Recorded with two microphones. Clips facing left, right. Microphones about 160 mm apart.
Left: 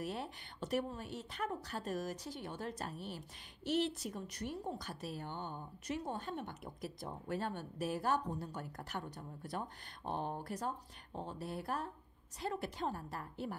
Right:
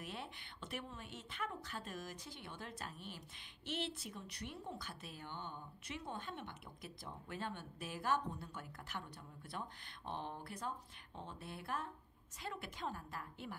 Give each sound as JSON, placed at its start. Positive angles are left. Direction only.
{"t": 0.0, "sound": "a woman's voice", "side_deg": 40}